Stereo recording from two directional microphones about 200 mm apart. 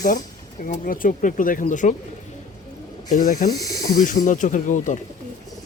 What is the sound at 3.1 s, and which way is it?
Speech, 40° left (ahead or behind).